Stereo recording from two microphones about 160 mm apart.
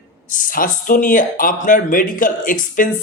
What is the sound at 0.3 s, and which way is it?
Speech, 60° left (ahead or behind).